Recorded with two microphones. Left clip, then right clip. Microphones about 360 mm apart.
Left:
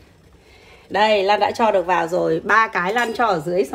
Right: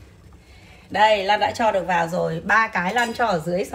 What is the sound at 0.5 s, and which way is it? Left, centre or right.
Speech, left.